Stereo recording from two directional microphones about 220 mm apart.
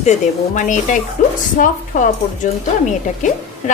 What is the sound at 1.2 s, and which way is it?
Speech, 35° left (ahead or behind).